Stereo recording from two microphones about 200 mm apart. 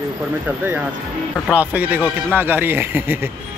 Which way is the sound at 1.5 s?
5° right (ahead or behind).